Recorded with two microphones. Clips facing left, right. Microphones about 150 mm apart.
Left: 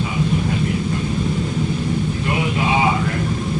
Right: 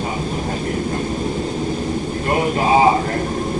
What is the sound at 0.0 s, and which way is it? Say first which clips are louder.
Vehicle: left 2 dB; 40° right (ahead or behind).